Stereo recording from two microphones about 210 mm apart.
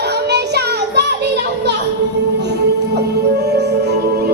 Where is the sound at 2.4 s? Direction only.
55° right (ahead or behind).